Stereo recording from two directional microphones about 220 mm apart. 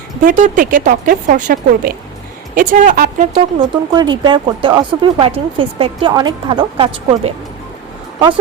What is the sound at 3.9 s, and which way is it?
Speech, 20° right (ahead or behind).